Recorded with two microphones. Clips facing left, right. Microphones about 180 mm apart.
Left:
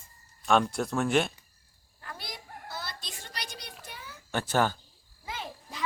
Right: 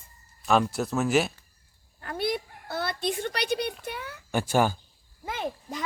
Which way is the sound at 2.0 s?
60° right (ahead or behind).